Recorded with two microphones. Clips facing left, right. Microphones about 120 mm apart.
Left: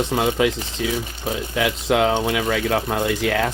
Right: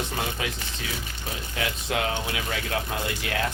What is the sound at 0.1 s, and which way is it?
Speech, 90° left.